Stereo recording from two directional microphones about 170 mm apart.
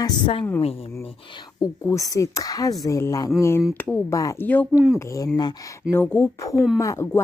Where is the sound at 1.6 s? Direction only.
20° left (ahead or behind).